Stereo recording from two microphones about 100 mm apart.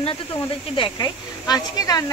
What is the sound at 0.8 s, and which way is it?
Speech, 45° left (ahead or behind).